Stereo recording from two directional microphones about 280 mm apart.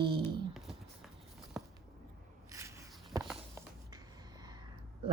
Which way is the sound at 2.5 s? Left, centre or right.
Centre.